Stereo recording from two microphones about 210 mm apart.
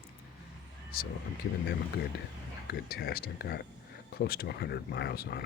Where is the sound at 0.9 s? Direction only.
45° left (ahead or behind).